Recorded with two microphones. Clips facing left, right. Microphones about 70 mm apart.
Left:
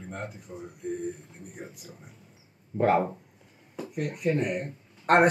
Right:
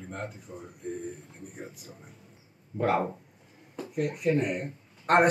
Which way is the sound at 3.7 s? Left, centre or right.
Centre.